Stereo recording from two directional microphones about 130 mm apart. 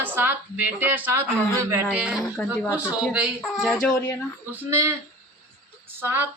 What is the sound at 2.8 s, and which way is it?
A woman's voice, 10° right (ahead or behind).